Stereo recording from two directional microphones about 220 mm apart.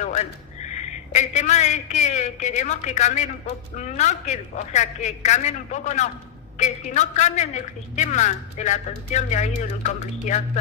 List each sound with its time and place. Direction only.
0.0 s a man's voice: 30° left (ahead or behind)